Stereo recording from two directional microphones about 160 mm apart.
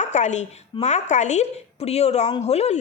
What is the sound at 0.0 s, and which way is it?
Speech, 45° left (ahead or behind).